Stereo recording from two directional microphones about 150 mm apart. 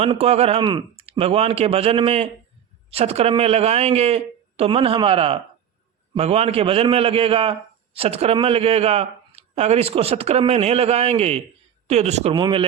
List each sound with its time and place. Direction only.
0.0 s a man's voice: 40° right (ahead or behind)
12.3 s a man's voice: 30° right (ahead or behind)